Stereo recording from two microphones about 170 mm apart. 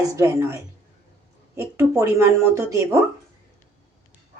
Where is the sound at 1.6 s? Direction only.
15° right (ahead or behind).